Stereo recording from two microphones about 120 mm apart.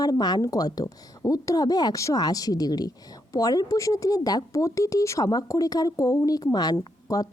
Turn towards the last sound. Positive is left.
turn(degrees=30)  # may be behind; listen again after turning